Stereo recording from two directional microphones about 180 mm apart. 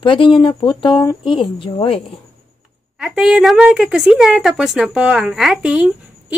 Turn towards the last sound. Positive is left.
turn(degrees=-5)  # may be behind; listen again after turning